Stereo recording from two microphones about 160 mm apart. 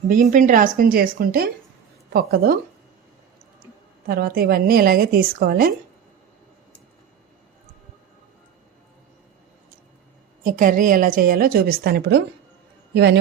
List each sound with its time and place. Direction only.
0.1 s a woman's voice: 55° right (ahead or behind); by 2.6 s 70° right (ahead or behind)
4.0 s a woman's voice: 70° right (ahead or behind)
10.4 s a woman's voice: 55° right (ahead or behind); by 13.1 s 90° right